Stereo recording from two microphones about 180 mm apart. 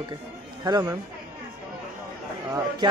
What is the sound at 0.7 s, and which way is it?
Speech, 20° right (ahead or behind).